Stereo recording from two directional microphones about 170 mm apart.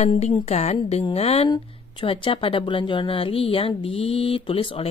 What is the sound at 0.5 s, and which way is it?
Speech, 40° left (ahead or behind).